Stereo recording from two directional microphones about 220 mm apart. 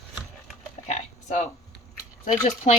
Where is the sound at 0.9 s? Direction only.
30° left (ahead or behind).